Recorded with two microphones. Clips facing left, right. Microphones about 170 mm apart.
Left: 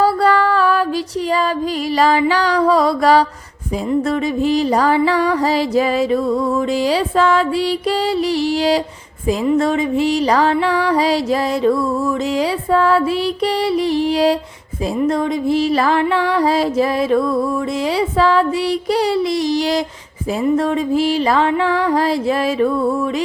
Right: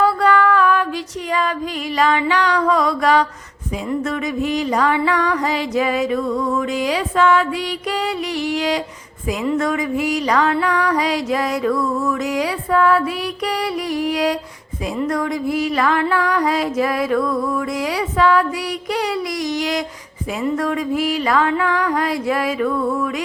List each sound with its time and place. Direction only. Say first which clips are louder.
0.0 s music: left 1 dB; 35° left (ahead or behind)
2.0 s music: left 2 dB; 35° left (ahead or behind)
4.4 s music: left 3 dB; 30° left (ahead or behind)
8.5 s music: left 4 dB; 30° left (ahead or behind)